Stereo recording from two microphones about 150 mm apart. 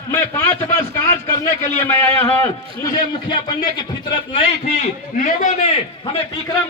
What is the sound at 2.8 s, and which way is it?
A man's voice, 25° left (ahead or behind).